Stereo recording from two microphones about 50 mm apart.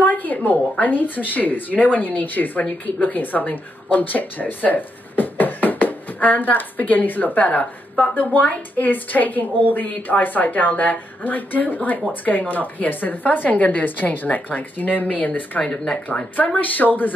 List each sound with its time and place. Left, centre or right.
0.0 s a woman's voice: left
15.6 s speech: centre
16.1 s a woman's voice: left